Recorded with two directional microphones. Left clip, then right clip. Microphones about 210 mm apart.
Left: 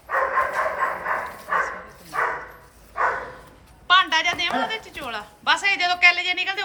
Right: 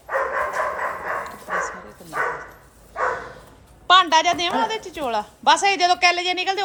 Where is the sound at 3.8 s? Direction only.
15° right (ahead or behind).